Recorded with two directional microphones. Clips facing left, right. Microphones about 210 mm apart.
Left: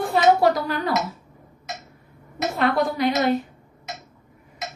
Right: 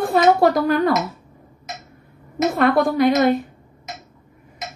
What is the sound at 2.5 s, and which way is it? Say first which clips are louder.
Speech: right 4 dB; 50° right (ahead or behind).